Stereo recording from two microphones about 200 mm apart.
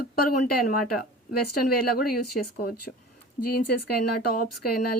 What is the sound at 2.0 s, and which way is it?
Speech, 50° left (ahead or behind).